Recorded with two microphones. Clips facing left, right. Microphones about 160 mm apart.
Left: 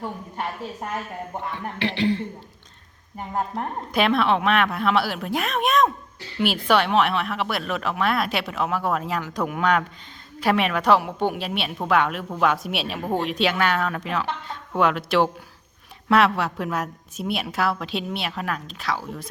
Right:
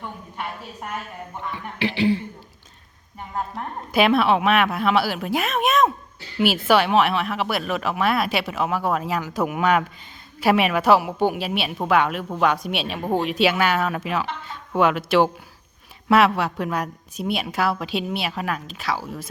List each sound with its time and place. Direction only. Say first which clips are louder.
0.0 s a sound: left 3 dB; 40° left (ahead or behind)
1.5 s a woman's voice: right 2 dB; 5° right (ahead or behind)
3.9 s a woman's voice: right 3 dB; 5° right (ahead or behind)